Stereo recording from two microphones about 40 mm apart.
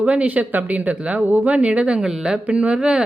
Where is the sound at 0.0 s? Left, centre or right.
Right.